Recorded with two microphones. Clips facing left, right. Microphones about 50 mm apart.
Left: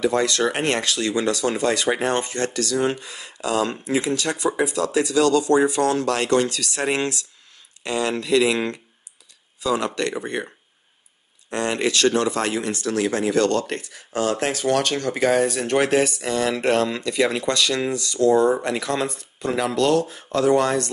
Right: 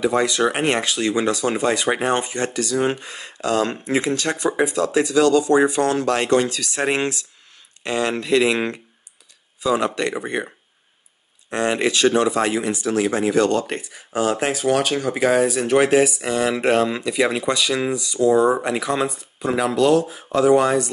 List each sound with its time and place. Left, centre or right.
0.0 s speech: centre
3.0 s speech: right
3.4 s speech: right; by 10.5 s centre
11.5 s speech: centre